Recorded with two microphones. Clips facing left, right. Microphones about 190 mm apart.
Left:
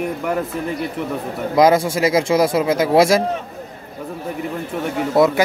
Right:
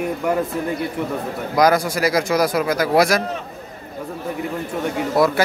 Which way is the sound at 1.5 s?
25° left (ahead or behind).